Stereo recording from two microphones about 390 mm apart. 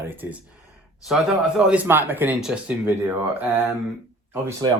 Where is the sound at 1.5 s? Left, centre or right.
Centre.